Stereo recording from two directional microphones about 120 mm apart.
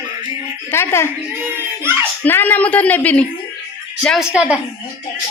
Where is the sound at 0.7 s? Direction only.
20° left (ahead or behind).